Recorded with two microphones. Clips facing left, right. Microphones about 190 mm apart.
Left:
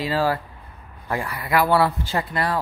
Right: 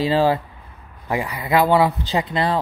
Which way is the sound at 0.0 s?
25° right (ahead or behind).